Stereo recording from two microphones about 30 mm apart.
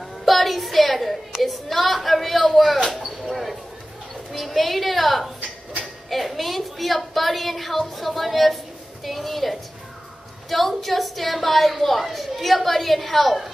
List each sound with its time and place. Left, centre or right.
0.0 s a woman's voice: centre
2.0 s a sound: centre
4.3 s a woman's voice: centre